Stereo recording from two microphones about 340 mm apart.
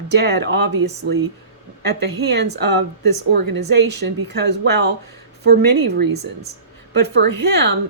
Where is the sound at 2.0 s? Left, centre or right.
Right.